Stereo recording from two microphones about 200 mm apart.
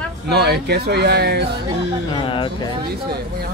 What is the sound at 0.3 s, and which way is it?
Speech, 55° right (ahead or behind).